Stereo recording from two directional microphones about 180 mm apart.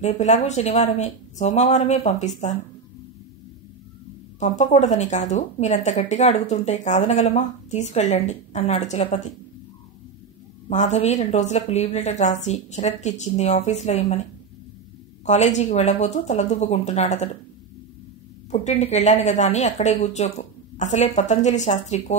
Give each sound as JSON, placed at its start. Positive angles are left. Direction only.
{"t": 0.0, "sound": "speech", "side_deg": 40}
{"t": 4.4, "sound": "speech", "side_deg": 40}
{"t": 10.7, "sound": "speech", "side_deg": 40}
{"t": 15.2, "sound": "speech", "side_deg": 40}
{"t": 18.5, "sound": "speech", "side_deg": 40}